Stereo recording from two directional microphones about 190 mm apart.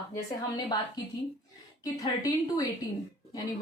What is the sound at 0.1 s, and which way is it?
A woman's voice, 20° left (ahead or behind).